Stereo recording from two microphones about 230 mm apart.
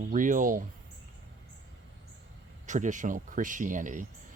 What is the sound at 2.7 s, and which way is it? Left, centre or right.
Speech, right.